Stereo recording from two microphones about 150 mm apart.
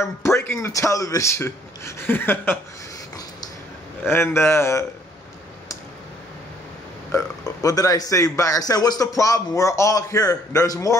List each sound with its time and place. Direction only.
0.2 s speech: 20° left (ahead or behind)
4.0 s speech: 15° left (ahead or behind)
7.1 s a man's voice: 20° left (ahead or behind)